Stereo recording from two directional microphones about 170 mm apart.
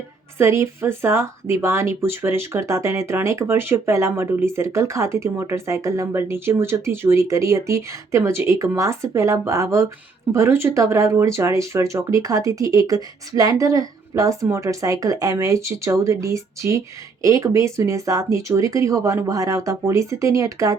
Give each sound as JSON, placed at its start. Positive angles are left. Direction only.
{"t": 0.3, "sound": "speech", "side_deg": -15}